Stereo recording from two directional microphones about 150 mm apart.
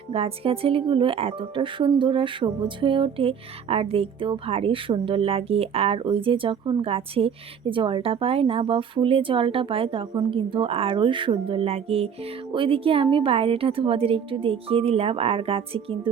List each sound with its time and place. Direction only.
0.1 s a woman's voice: 40° right (ahead or behind)